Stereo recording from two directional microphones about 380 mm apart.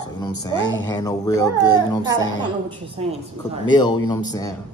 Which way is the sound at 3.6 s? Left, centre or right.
Centre.